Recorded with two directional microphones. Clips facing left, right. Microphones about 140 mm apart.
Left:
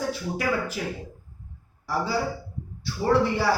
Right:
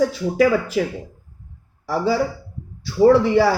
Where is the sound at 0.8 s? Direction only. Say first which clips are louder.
Right 10 dB; 90° right.